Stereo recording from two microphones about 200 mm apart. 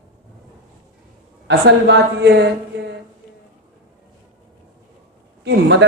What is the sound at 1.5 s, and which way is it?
A woman's voice, 60° right (ahead or behind).